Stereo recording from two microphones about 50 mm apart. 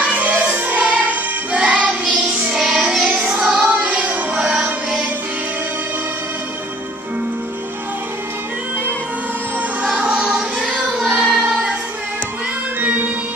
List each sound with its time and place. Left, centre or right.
0.0 s music: right
2.5 s music: centre
3.3 s music: centre
9.9 s music: right
11.2 s choir: centre
12.8 s music: right